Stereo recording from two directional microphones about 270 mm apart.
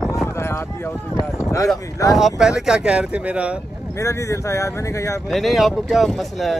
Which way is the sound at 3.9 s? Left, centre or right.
Centre.